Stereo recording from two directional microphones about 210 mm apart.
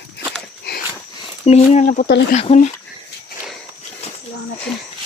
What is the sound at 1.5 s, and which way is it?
Speech, 30° left (ahead or behind).